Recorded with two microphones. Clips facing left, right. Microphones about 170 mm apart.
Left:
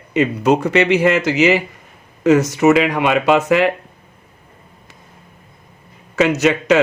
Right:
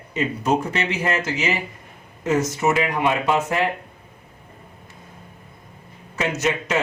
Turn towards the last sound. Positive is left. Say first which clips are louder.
# left 8 dB
turn(degrees=75)  # may be behind; listen again after turning